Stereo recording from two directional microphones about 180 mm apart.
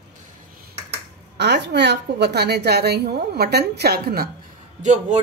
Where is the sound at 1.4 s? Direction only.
70° right (ahead or behind).